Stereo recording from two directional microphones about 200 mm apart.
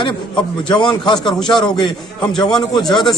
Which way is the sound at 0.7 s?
25° left (ahead or behind).